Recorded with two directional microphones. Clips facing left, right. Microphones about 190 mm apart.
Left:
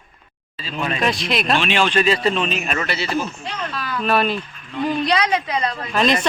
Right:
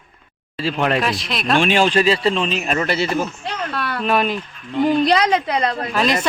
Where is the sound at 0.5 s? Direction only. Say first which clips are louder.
Right 7 dB; 70° right (ahead or behind).